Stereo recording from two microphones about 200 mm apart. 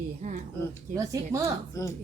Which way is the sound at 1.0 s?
15° right (ahead or behind).